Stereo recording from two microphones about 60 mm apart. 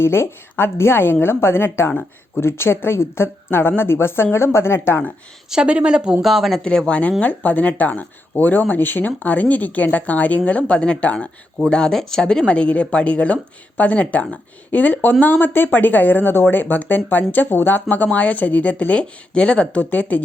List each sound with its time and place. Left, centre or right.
0.0 s a woman's voice: left
1.9 s speech: left
2.4 s a woman's voice: left
5.5 s speech: centre
6.2 s speech: centre
6.6 s speech: centre
11.7 s speech: centre
19.7 s speech: left